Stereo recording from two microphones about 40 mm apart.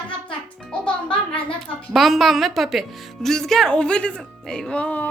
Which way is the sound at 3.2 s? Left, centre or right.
Centre.